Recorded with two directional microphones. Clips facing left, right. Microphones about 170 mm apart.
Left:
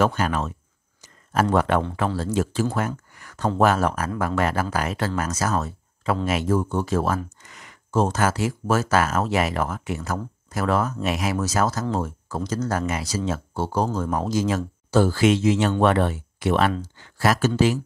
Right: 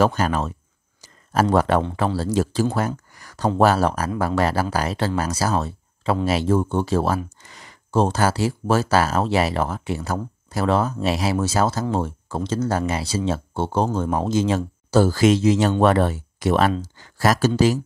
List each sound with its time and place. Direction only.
0.0 s speech: 40° right (ahead or behind)
1.0 s a sound: 35° right (ahead or behind)
2.1 s speech: 35° right (ahead or behind)